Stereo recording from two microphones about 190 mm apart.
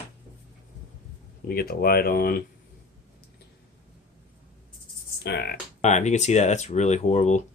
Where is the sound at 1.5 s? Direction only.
55° left (ahead or behind).